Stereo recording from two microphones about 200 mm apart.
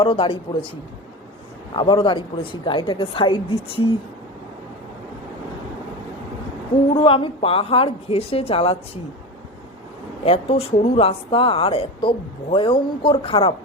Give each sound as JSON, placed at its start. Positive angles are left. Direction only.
{"t": 0.0, "sound": "speech", "side_deg": 25}
{"t": 1.7, "sound": "speech", "side_deg": 25}
{"t": 6.9, "sound": "speech", "side_deg": 25}
{"t": 10.2, "sound": "speech", "side_deg": 30}